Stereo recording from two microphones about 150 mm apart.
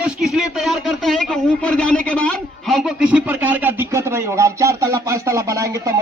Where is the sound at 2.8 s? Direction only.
5° right (ahead or behind); by 5.9 s 20° right (ahead or behind).